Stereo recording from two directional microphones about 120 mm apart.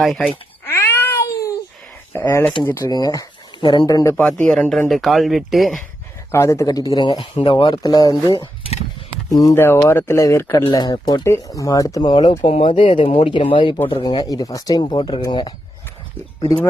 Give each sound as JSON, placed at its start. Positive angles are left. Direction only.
{"t": 0.0, "sound": "speech", "side_deg": 0}
{"t": 0.6, "sound": "cat", "side_deg": 20}
{"t": 2.1, "sound": "speech", "side_deg": 15}
{"t": 4.1, "sound": "speech", "side_deg": 10}
{"t": 6.3, "sound": "speech", "side_deg": 25}
{"t": 7.8, "sound": "speech", "side_deg": 35}
{"t": 9.3, "sound": "speech", "side_deg": 30}
{"t": 9.6, "sound": "speech", "side_deg": 15}
{"t": 10.7, "sound": "speech", "side_deg": 35}
{"t": 12.4, "sound": "speech", "side_deg": 50}